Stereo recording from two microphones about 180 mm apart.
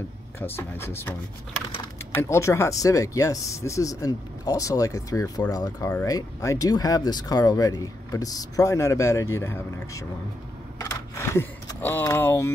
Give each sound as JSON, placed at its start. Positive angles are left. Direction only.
{"t": 0.4, "sound": "speech", "side_deg": 10}
{"t": 2.1, "sound": "speech", "side_deg": 15}
{"t": 11.3, "sound": "speech", "side_deg": 10}